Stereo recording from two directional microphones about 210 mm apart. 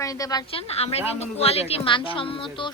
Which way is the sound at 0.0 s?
15° left (ahead or behind).